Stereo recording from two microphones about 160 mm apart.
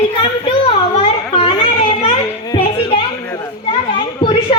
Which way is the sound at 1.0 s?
35° left (ahead or behind).